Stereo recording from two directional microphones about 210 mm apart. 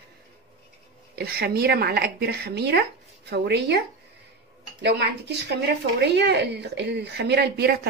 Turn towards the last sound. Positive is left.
turn(degrees=-50)  # may be behind; listen again after turning